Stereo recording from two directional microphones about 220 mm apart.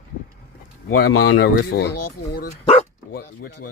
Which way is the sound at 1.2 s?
45° left (ahead or behind).